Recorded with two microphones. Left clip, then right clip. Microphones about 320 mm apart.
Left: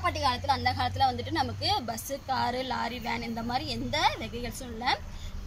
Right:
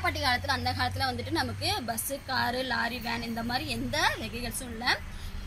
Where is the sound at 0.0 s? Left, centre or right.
Centre.